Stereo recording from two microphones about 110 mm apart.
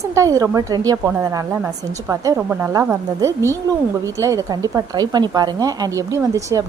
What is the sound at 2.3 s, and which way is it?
A woman's voice, 20° right (ahead or behind).